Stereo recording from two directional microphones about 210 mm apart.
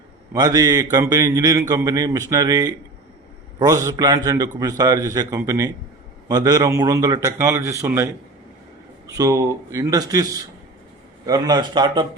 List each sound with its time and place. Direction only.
0.3 s a man's voice: 15° right (ahead or behind)
9.1 s a man's voice: 15° right (ahead or behind)